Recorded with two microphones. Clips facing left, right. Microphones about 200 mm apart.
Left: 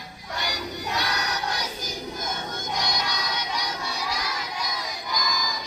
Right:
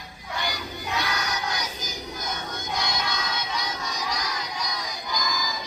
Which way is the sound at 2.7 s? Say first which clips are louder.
Right 1 dB; 15° left (ahead or behind).